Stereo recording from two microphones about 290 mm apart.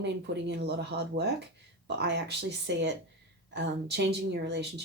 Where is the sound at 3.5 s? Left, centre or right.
Right.